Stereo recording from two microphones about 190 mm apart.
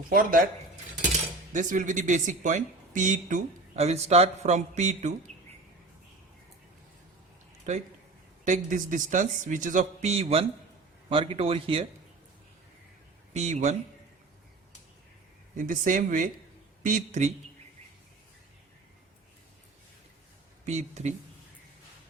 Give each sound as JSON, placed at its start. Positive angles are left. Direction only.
{"t": 0.1, "sound": "speech", "side_deg": -50}
{"t": 1.5, "sound": "speech", "side_deg": -40}
{"t": 8.4, "sound": "speech", "side_deg": -40}
{"t": 13.3, "sound": "speech", "side_deg": -35}
{"t": 15.5, "sound": "speech", "side_deg": -45}
{"t": 20.7, "sound": "speech", "side_deg": -35}